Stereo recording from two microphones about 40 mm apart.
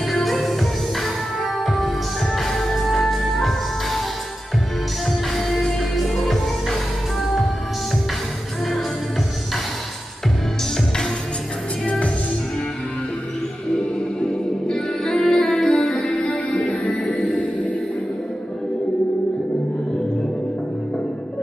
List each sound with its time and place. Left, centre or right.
0.0 s music: centre
5.0 s music: centre
14.2 s music: centre
16.7 s music: left